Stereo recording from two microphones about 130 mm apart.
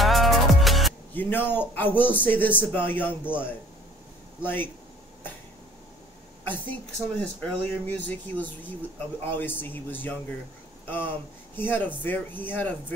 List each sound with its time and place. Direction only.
0.0 s music: centre (ahead or behind)
1.1 s speech: 15° left (ahead or behind)
4.4 s speech: 15° left (ahead or behind)
6.4 s speech: 15° left (ahead or behind)